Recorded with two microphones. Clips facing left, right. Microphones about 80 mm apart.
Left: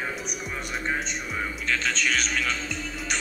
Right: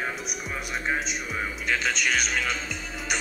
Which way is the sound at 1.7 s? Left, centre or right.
Centre.